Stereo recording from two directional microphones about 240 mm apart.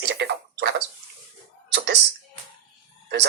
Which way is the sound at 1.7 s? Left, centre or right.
Right.